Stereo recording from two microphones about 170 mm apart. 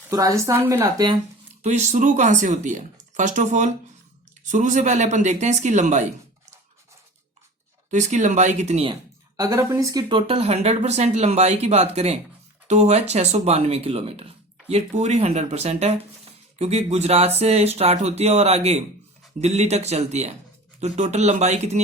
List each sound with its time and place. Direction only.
0.1 s a woman's voice: 20° right (ahead or behind)
1.6 s speech: 45° right (ahead or behind)
7.9 s speech: 45° right (ahead or behind)
9.4 s speech: 15° right (ahead or behind); by 21.8 s 40° right (ahead or behind)